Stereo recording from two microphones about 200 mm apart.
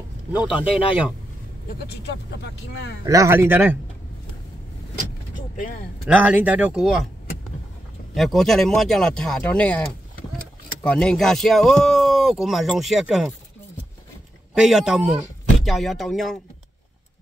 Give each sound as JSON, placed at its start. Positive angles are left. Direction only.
{"t": 0.3, "sound": "speech", "side_deg": -5}
{"t": 1.8, "sound": "speech", "side_deg": 55}
{"t": 3.1, "sound": "speech", "side_deg": -15}
{"t": 6.0, "sound": "speech", "side_deg": -5}
{"t": 8.1, "sound": "speech", "side_deg": 0}
{"t": 14.5, "sound": "speech", "side_deg": -5}